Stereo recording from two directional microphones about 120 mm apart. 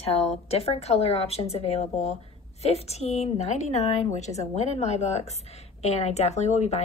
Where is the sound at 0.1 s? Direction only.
60° left (ahead or behind).